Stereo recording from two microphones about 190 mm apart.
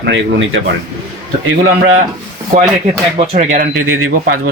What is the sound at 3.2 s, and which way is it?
Speech, 35° right (ahead or behind).